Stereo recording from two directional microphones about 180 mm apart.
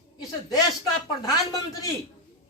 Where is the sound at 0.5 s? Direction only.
20° left (ahead or behind).